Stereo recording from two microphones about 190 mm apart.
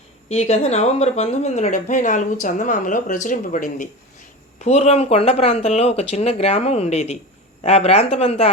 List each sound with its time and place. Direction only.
0.3 s speech: 35° left (ahead or behind)